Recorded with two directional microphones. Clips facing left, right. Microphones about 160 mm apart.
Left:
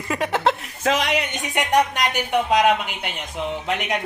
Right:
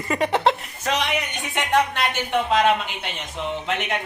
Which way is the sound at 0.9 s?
90° left.